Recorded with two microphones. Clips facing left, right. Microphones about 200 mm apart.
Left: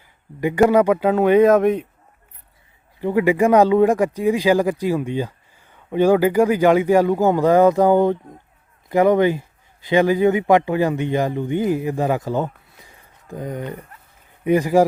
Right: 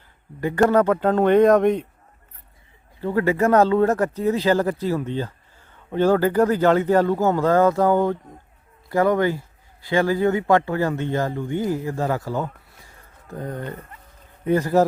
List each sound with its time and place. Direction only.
0.6 s speech: 10° left (ahead or behind)
3.0 s speech: 15° left (ahead or behind)